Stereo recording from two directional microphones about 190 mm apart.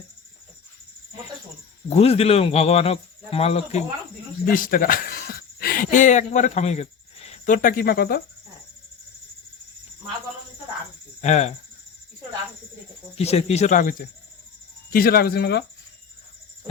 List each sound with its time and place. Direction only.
1.9 s a man's voice: 30° left (ahead or behind)
4.4 s speech: 45° left (ahead or behind)
11.2 s a man's voice: 35° left (ahead or behind)
13.1 s a man's voice: 35° left (ahead or behind); by 15.6 s 60° left (ahead or behind)